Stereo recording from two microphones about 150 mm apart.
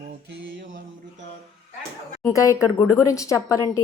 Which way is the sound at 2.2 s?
15° left (ahead or behind).